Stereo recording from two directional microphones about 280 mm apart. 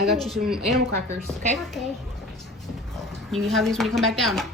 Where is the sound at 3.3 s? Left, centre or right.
Centre.